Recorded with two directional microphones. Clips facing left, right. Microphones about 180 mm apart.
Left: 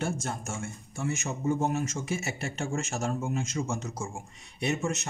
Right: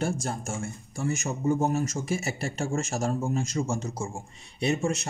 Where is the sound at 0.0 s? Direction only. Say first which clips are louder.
Right 3 dB; 35° right (ahead or behind).